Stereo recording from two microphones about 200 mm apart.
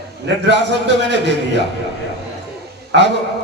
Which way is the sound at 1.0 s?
60° right (ahead or behind).